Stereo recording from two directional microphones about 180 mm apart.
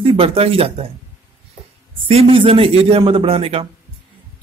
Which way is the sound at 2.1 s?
30° right (ahead or behind).